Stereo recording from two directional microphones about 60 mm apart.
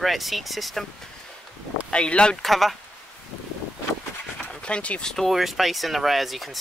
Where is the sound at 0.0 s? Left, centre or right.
Centre.